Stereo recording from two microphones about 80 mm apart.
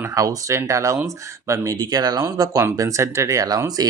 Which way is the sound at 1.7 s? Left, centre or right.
Right.